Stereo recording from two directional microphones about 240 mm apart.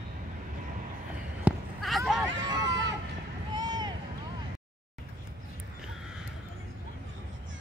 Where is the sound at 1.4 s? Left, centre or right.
Centre.